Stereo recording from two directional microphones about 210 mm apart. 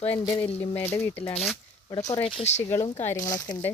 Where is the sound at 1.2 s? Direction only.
30° left (ahead or behind).